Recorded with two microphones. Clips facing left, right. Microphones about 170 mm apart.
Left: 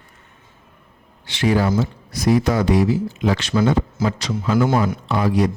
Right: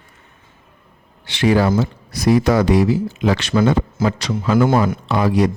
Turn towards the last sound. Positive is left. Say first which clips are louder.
# right 2 dB
turn(degrees=-85)